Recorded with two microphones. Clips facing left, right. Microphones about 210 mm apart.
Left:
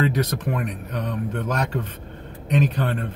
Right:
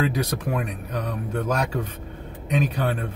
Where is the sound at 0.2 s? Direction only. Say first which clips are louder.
Left 1 dB; 10° right (ahead or behind).